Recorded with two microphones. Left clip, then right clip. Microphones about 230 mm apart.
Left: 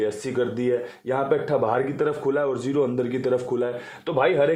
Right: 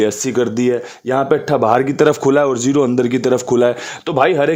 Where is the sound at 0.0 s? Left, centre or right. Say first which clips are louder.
Right 8 dB; right.